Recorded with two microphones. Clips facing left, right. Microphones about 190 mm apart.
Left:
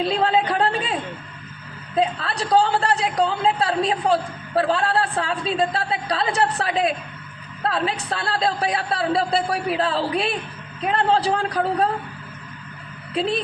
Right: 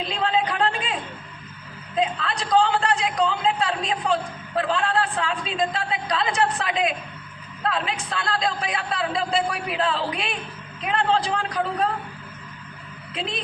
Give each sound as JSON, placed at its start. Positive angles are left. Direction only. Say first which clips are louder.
{"t": 0.0, "sound": "a sound", "louder": "left 4 dB", "side_deg": 35}
{"t": 2.0, "sound": "a man's voice", "louder": "left 3 dB", "side_deg": 35}
{"t": 13.1, "sound": "a man's voice", "louder": "left 8 dB", "side_deg": 35}